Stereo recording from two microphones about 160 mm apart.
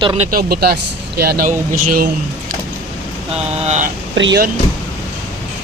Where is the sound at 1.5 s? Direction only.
60° right (ahead or behind).